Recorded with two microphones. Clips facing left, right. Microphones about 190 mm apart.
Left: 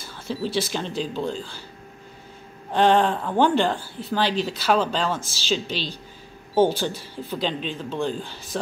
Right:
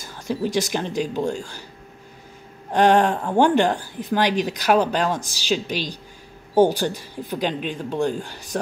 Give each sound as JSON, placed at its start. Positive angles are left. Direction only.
{"t": 0.0, "sound": "speech", "side_deg": -15}
{"t": 2.7, "sound": "speech", "side_deg": -10}